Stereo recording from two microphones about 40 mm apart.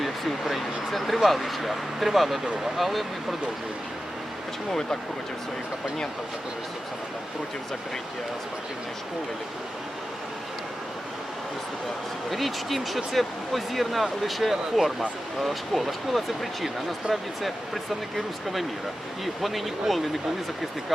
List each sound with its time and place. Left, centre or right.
0.0 s speech: centre
4.7 s speech: centre
12.3 s speech: centre
19.2 s speech: centre